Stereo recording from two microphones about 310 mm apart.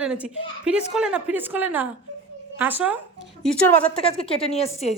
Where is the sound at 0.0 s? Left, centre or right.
Centre.